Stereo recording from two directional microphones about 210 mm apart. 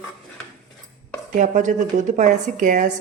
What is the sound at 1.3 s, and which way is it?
Speech, 40° right (ahead or behind).